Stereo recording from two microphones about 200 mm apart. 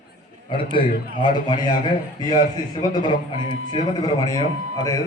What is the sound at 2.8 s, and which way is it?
A man's voice, 20° left (ahead or behind).